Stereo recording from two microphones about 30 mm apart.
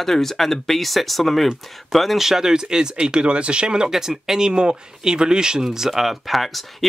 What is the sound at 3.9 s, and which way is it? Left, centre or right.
Speech, centre.